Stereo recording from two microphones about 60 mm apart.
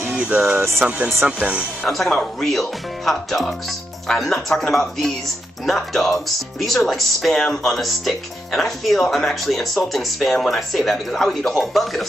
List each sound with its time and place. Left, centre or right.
0.1 s a sound: centre
0.8 s speech: centre
1.9 s speech: centre